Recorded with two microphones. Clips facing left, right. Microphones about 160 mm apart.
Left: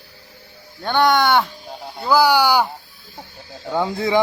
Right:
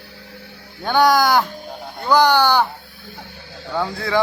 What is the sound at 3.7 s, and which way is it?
Speech, 20° left (ahead or behind).